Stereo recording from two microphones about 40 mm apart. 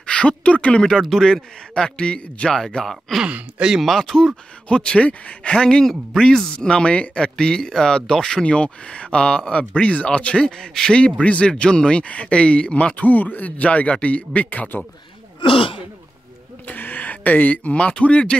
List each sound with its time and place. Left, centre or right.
0.0 s speech: left
1.0 s a man's voice: centre
1.3 s speech: centre
2.5 s speech: centre
4.6 s speech: left
8.5 s speech: left
11.0 s speech: left
12.9 s a man's voice: left
16.6 s a sound: left
17.7 s a man's voice: left